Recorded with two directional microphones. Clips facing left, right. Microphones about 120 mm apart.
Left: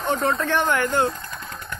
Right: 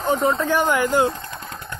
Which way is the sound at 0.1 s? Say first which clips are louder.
Right 3 dB; 10° right (ahead or behind).